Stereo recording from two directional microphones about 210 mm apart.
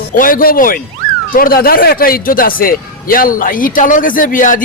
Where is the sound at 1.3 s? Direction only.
45° left (ahead or behind).